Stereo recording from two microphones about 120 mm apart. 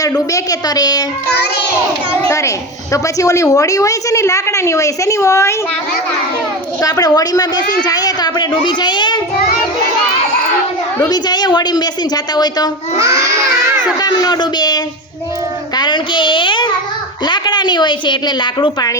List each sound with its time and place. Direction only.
0.0 s a woman's voice: 30° left (ahead or behind)
2.2 s a woman's voice: 25° left (ahead or behind)
6.8 s a woman's voice: 30° left (ahead or behind)
11.1 s a woman's voice: 35° left (ahead or behind)
14.0 s a woman's voice: 35° left (ahead or behind)
15.7 s child singing: 40° left (ahead or behind)
17.2 s a woman's voice: 40° left (ahead or behind)